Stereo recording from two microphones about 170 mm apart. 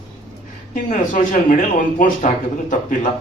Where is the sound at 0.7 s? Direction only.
50° left (ahead or behind).